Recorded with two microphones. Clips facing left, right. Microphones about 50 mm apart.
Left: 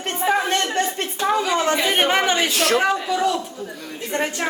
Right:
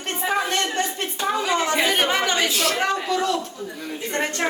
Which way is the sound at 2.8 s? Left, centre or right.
Centre.